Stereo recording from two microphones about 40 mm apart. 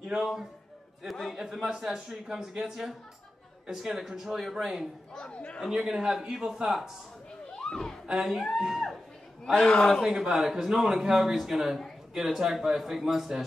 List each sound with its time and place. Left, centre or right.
0.0 s a man's voice: centre
5.3 s a man's voice: left
5.7 s speech: centre
7.5 s a sound: centre
8.1 s a man's voice: centre
9.7 s a man's voice: centre
10.0 s a man's voice: centre